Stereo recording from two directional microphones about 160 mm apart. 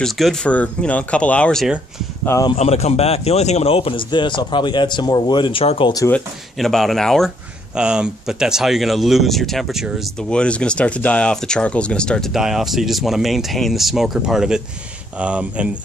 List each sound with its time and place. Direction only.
0.0 s speech: 5° left (ahead or behind)
2.2 s speech: 20° left (ahead or behind)
2.5 s a man's voice: 40° left (ahead or behind)
5.9 s speech: 15° left (ahead or behind)
6.6 s speech: centre (ahead or behind)